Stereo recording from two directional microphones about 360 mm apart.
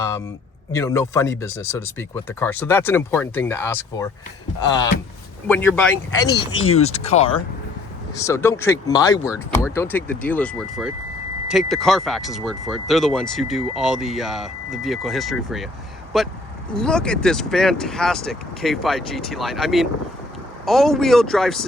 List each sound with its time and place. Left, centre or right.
0.7 s speech: centre
6.3 s speech: left
6.7 s speech: centre